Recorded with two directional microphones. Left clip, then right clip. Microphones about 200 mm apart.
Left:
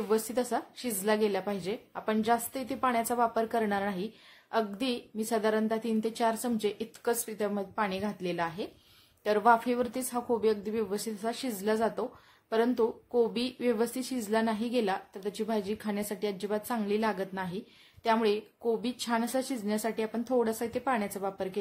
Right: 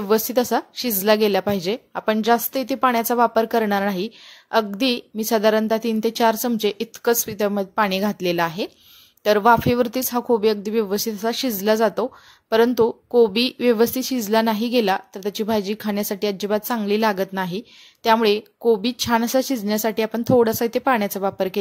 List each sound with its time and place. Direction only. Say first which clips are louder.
0.1 s speech: right 11 dB; 35° right (ahead or behind)